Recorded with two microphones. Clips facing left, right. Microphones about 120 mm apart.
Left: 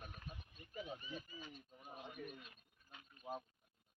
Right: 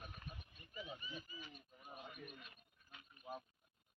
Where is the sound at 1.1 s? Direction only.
35° left (ahead or behind).